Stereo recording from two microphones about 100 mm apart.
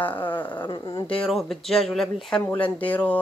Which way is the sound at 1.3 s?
Centre (ahead or behind).